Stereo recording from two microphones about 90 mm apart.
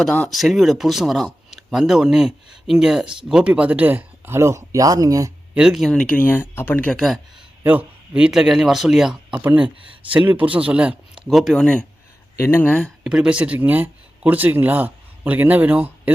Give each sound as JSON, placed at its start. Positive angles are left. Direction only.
{"t": 0.0, "sound": "speech", "side_deg": 10}
{"t": 0.3, "sound": "speech", "side_deg": 0}
{"t": 5.5, "sound": "speech", "side_deg": -5}
{"t": 5.9, "sound": "speech", "side_deg": 10}
{"t": 6.1, "sound": "speech", "side_deg": 20}
{"t": 6.9, "sound": "speech", "side_deg": 0}
{"t": 7.6, "sound": "a man's voice", "side_deg": -20}
{"t": 9.4, "sound": "speech", "side_deg": -20}
{"t": 11.3, "sound": "speech", "side_deg": 0}
{"t": 12.4, "sound": "speech", "side_deg": 25}
{"t": 13.1, "sound": "speech", "side_deg": -10}